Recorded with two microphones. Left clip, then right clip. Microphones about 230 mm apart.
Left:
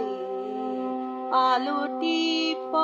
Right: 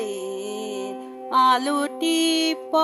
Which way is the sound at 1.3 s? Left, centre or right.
Right.